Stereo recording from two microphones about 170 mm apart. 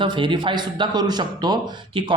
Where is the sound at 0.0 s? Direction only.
30° right (ahead or behind).